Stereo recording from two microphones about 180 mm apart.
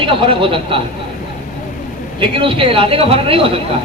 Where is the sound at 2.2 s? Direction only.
30° right (ahead or behind).